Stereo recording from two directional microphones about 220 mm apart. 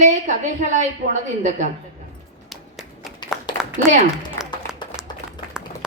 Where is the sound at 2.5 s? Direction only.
Centre (ahead or behind).